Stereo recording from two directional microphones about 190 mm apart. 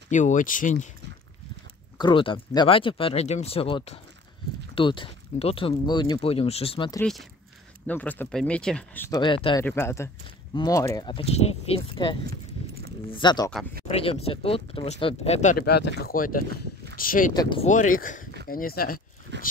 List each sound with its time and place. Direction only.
0.1 s speech: 40° left (ahead or behind)
2.0 s speech: 25° left (ahead or behind)
7.0 s speech: centre (ahead or behind)
9.1 s speech: 25° left (ahead or behind)
9.7 s speech: 15° left (ahead or behind); by 15.5 s 35° left (ahead or behind)
15.5 s speech: 55° left (ahead or behind)
17.3 s speech: 20° left (ahead or behind)
17.6 s speech: 45° left (ahead or behind)